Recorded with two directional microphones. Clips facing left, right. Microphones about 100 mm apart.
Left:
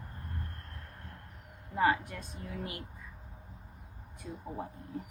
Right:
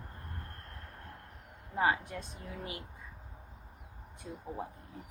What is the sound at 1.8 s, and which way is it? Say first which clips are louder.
Speech: left 2 dB; 20° right (ahead or behind).